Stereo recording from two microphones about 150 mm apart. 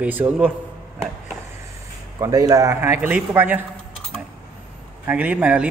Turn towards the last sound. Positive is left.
turn(degrees=-10)  # may be behind; listen again after turning